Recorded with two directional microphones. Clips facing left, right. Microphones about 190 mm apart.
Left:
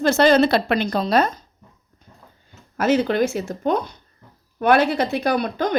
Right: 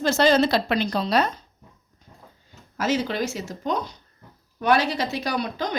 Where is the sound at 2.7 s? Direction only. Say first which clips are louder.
Left 6 dB; 55° left (ahead or behind).